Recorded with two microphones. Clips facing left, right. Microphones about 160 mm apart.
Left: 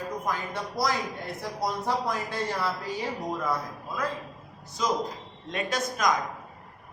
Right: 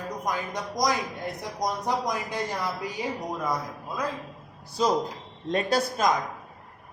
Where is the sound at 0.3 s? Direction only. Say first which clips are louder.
Right 4 dB; 15° right (ahead or behind).